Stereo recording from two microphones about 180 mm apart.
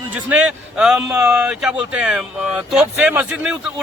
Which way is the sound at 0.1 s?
5° right (ahead or behind).